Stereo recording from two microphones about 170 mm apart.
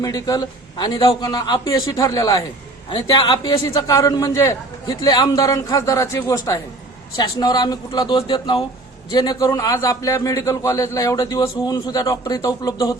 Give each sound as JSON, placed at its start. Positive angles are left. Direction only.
{"t": 0.0, "sound": "a man's voice", "side_deg": 20}